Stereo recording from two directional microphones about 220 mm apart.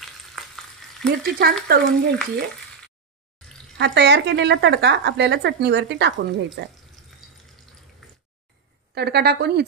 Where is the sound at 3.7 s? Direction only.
50° right (ahead or behind).